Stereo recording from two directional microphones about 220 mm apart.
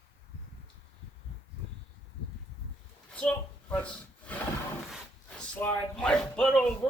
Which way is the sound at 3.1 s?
5° left (ahead or behind).